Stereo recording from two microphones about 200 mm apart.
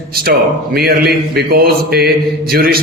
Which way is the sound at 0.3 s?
50° right (ahead or behind).